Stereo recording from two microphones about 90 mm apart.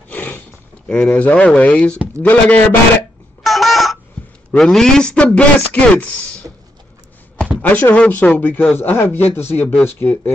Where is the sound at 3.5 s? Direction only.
Centre (ahead or behind).